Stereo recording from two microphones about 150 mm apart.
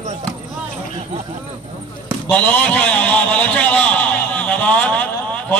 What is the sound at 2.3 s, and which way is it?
A man's voice, 10° left (ahead or behind).